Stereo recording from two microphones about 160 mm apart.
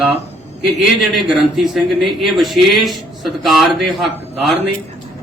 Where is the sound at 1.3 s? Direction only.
Centre (ahead or behind).